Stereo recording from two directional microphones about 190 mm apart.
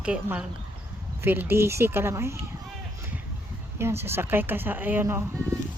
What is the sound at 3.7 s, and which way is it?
A woman's voice, 15° right (ahead or behind).